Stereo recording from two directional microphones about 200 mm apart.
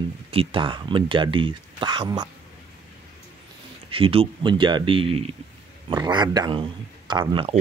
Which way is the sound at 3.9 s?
30° right (ahead or behind).